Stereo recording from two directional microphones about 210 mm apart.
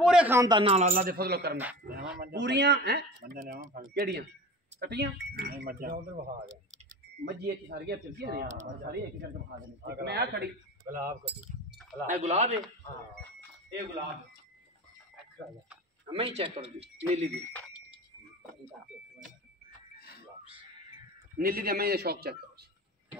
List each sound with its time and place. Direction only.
0.0 s a man's voice: 5° right (ahead or behind); by 10.5 s 50° right (ahead or behind)
10.9 s speech: 40° right (ahead or behind)
16.1 s a man's voice: 25° right (ahead or behind)
21.4 s speech: 45° right (ahead or behind)